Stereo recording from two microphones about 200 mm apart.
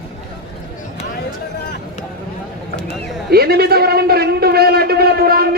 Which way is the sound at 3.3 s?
50° right (ahead or behind).